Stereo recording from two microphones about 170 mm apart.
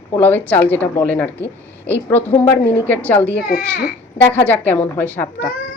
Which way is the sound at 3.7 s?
70° left (ahead or behind).